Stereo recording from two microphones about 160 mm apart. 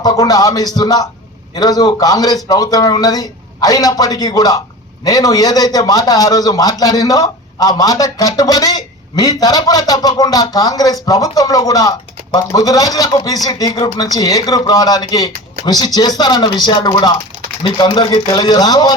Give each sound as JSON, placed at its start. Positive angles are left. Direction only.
{"t": 0.0, "sound": "a man's voice", "side_deg": 25}